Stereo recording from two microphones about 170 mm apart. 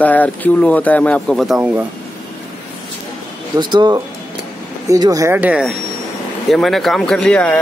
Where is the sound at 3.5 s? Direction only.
25° right (ahead or behind); by 7.6 s 5° left (ahead or behind).